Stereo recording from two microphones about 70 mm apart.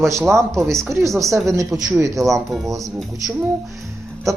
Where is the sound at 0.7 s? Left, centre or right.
Right.